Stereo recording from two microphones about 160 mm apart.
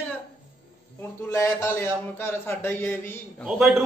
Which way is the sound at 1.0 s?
15° left (ahead or behind).